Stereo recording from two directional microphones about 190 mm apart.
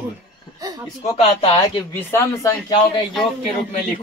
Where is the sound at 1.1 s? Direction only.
30° left (ahead or behind).